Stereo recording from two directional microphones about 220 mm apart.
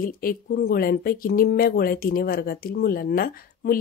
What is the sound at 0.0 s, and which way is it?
A woman's voice, 40° left (ahead or behind).